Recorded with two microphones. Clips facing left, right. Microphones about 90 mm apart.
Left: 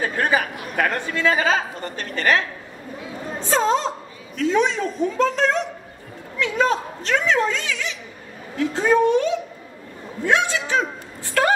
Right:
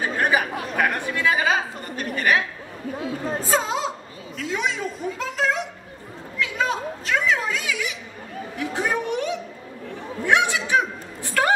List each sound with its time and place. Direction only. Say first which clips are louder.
0.0 s speech: left 1 dB; 15° right (ahead or behind)
3.5 s a woman's voice: left 6 dB; 5° right (ahead or behind)